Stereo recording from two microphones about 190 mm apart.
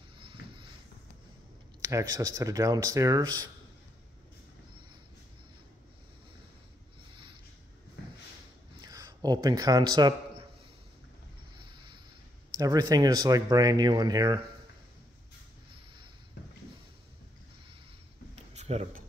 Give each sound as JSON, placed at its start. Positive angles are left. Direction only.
{"t": 0.2, "sound": "a sound", "side_deg": -25}
{"t": 1.8, "sound": "speech", "side_deg": -15}
{"t": 8.8, "sound": "a man's voice", "side_deg": -20}
{"t": 11.5, "sound": "vehicle", "side_deg": -25}
{"t": 12.5, "sound": "speech", "side_deg": -20}
{"t": 18.3, "sound": "a sound", "side_deg": -35}